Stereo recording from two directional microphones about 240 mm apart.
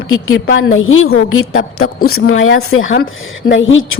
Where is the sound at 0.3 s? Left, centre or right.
Left.